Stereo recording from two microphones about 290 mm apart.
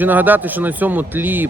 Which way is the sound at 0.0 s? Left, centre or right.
Centre.